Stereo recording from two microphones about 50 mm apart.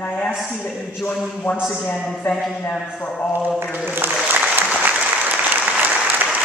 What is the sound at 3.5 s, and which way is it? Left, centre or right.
Speech, right.